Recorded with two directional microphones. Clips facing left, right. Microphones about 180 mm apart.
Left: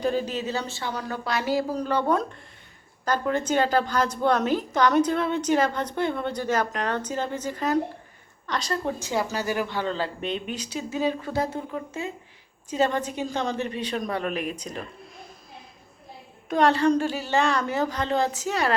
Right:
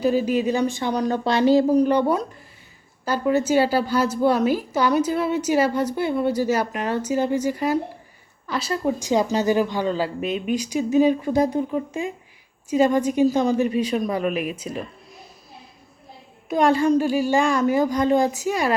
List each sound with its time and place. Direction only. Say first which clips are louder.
0.0 s a woman's voice: right 6 dB; 10° right (ahead or behind)
16.5 s a woman's voice: right 2 dB; 10° right (ahead or behind)